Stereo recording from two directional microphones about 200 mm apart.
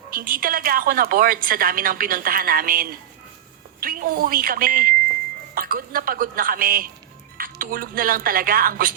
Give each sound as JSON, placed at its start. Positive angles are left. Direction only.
{"t": 0.1, "sound": "a woman's voice", "side_deg": -45}